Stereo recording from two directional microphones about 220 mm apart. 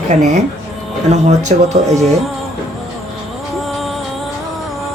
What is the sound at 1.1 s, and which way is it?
Speech, 30° right (ahead or behind).